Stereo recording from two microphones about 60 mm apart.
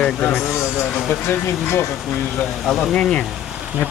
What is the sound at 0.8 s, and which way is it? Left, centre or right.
Speech, centre.